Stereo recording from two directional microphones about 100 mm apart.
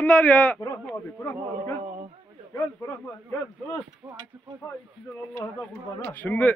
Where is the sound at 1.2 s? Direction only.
25° left (ahead or behind).